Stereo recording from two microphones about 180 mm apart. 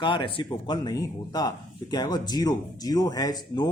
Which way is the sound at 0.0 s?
25° left (ahead or behind).